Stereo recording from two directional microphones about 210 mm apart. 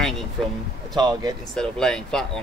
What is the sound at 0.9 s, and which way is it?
Speech, 20° right (ahead or behind).